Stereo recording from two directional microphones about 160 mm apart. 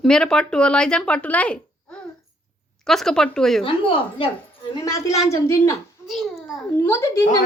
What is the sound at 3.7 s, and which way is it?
A woman's voice, 30° left (ahead or behind).